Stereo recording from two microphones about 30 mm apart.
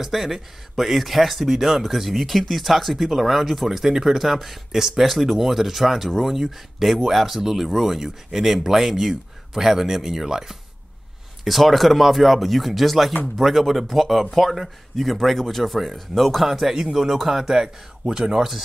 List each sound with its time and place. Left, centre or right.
0.0 s speech: centre
11.4 s speech: centre
17.6 s speech: right